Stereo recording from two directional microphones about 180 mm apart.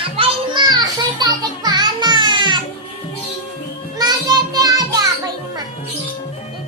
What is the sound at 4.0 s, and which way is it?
Music, 20° right (ahead or behind).